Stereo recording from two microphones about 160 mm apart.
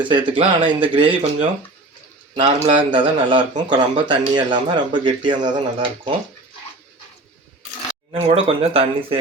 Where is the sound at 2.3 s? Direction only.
35° right (ahead or behind).